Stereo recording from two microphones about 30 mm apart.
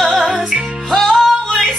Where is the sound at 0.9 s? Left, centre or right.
Centre.